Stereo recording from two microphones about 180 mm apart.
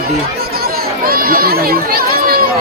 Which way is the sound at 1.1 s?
50° right (ahead or behind).